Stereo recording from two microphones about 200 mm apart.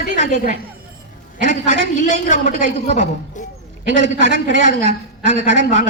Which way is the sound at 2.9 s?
35° left (ahead or behind).